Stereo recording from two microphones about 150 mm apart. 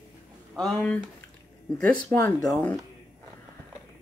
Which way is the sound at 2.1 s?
20° left (ahead or behind).